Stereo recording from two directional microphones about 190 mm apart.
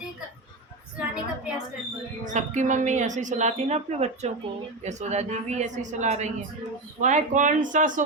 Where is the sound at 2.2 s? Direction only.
40° right (ahead or behind).